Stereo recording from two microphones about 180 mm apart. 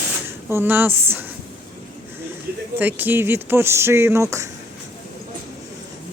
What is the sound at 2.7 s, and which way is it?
Speech, 10° right (ahead or behind).